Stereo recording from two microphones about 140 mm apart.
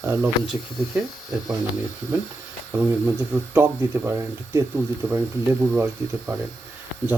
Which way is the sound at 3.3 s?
15° right (ahead or behind).